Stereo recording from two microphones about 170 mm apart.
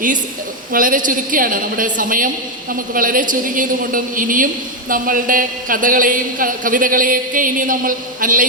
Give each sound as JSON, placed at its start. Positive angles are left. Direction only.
{"t": 0.7, "sound": "a man's voice", "side_deg": -55}